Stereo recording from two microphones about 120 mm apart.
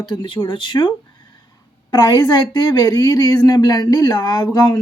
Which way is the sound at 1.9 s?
35° left (ahead or behind).